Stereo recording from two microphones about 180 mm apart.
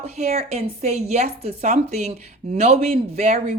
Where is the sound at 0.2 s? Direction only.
35° right (ahead or behind).